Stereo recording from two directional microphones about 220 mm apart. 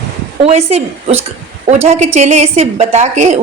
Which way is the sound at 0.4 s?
30° right (ahead or behind).